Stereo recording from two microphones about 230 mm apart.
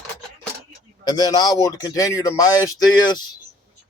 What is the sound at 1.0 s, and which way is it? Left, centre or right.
A man's voice, centre.